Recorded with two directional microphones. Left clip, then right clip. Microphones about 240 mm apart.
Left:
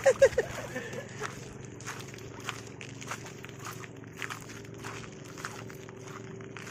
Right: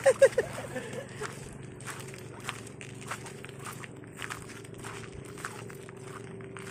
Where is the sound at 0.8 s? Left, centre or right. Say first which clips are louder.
Even; centre.